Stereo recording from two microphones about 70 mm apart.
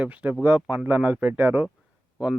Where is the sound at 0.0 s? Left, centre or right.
Right.